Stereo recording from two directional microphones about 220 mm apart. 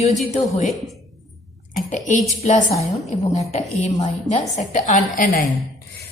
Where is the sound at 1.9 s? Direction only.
35° left (ahead or behind).